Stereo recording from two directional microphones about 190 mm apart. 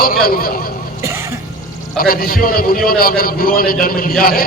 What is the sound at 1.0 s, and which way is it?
Throat clearing, 15° right (ahead or behind).